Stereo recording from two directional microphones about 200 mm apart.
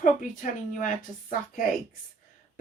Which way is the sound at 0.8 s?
40° left (ahead or behind).